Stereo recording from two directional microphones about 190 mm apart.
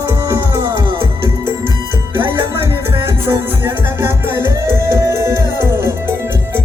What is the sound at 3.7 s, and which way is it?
Music, 15° right (ahead or behind).